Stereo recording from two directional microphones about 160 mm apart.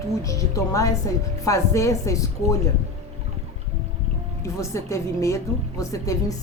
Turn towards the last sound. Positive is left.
turn(degrees=20)  # may be behind; listen again after turning